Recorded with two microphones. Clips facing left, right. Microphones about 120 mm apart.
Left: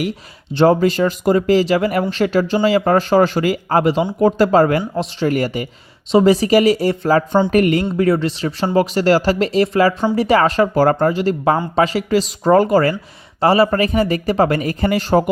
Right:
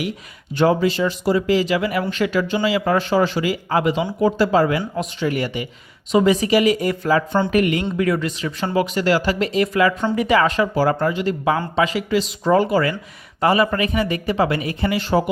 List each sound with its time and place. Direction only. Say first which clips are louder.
0.5 s speech: left 4 dB; 40° left (ahead or behind)